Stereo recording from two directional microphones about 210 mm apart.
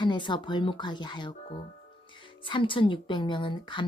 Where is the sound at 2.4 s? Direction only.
25° left (ahead or behind).